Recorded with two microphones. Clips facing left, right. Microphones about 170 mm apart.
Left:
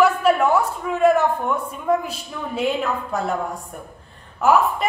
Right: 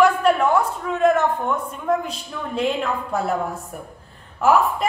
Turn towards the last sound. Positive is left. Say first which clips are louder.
# even
turn(degrees=0)  # may be behind; listen again after turning